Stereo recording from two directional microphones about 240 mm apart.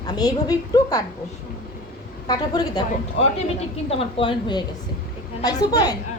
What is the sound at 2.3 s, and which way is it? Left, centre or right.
Speech, centre.